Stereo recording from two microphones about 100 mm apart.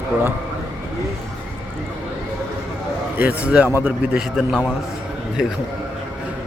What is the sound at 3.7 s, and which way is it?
Speech, 15° right (ahead or behind).